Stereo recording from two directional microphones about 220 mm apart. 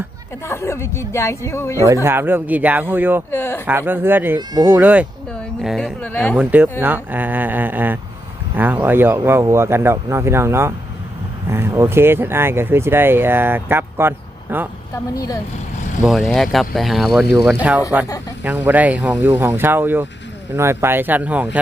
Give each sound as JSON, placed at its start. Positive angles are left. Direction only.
{"t": 0.4, "sound": "speech", "side_deg": 10}
{"t": 2.0, "sound": "speech", "side_deg": -10}
{"t": 3.3, "sound": "speech", "side_deg": 10}
{"t": 3.7, "sound": "speech", "side_deg": -10}
{"t": 6.3, "sound": "speech", "side_deg": -5}
{"t": 14.9, "sound": "speech", "side_deg": 15}
{"t": 16.0, "sound": "speech", "side_deg": 0}